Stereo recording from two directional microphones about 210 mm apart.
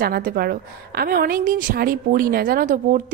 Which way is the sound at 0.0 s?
45° right (ahead or behind).